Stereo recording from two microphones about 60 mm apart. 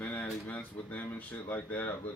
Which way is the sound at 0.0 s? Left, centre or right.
Left.